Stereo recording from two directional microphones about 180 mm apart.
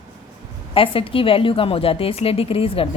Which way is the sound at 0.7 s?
30° left (ahead or behind).